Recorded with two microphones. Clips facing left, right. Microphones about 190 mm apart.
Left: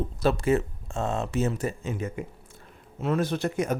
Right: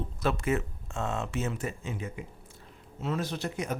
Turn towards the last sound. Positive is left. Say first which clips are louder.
# left 7 dB
turn(degrees=50)  # may be behind; listen again after turning